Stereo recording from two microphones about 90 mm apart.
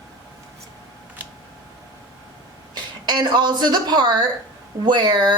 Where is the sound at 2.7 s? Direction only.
55° right (ahead or behind).